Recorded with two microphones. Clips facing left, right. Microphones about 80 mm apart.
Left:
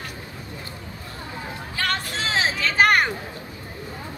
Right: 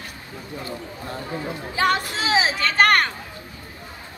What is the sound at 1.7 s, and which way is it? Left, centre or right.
Music, centre.